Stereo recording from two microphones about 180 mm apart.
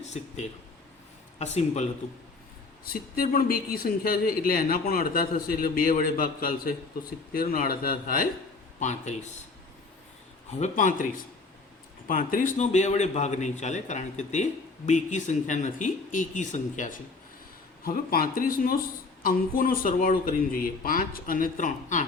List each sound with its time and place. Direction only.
0.0 s a man's voice: 40° left (ahead or behind)
2.8 s a man's voice: 55° left (ahead or behind)
8.8 s a man's voice: 40° left (ahead or behind)
10.6 s speech: 45° left (ahead or behind)
12.0 s a man's voice: 50° left (ahead or behind)